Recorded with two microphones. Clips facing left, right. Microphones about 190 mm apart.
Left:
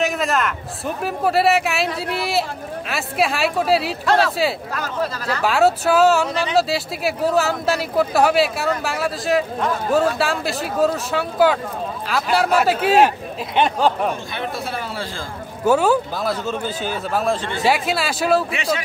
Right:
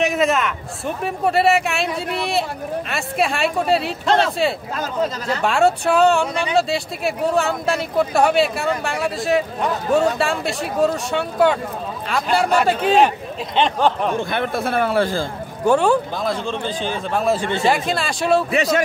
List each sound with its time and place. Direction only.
0.0 s speech: centre (ahead or behind)
4.0 s speech: 20° right (ahead or behind)
5.4 s speech: 5° left (ahead or behind)
14.3 s a man's voice: 55° right (ahead or behind)
15.6 s speech: 5° left (ahead or behind)
18.5 s a man's voice: 40° right (ahead or behind)